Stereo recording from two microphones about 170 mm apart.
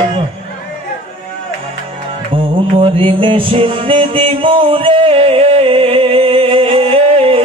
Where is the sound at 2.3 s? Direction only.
30° right (ahead or behind).